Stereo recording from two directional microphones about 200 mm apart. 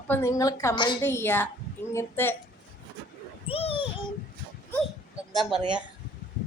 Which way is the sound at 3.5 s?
30° left (ahead or behind).